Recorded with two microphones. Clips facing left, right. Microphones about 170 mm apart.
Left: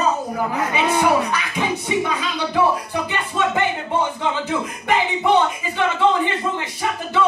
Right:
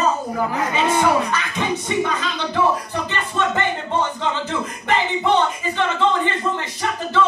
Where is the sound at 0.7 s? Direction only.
10° left (ahead or behind).